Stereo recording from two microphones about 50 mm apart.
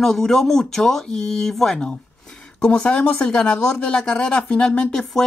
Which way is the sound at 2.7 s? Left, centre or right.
Left.